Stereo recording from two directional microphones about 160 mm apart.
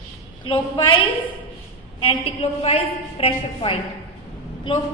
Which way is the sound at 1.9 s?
35° left (ahead or behind).